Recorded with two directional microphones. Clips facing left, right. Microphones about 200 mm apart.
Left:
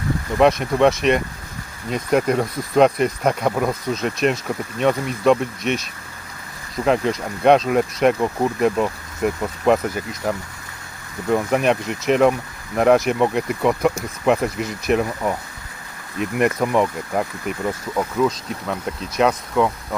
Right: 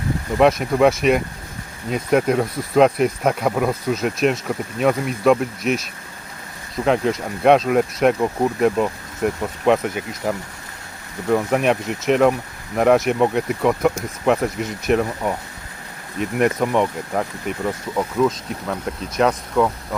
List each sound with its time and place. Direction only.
0.3 s speech: centre (ahead or behind)